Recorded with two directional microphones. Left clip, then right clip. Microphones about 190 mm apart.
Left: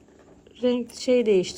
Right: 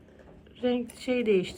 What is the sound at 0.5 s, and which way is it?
A woman's voice, 20° left (ahead or behind).